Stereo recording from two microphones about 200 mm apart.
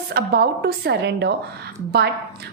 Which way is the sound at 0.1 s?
50° right (ahead or behind).